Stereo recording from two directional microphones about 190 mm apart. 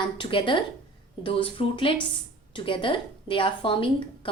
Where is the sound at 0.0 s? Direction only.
25° left (ahead or behind).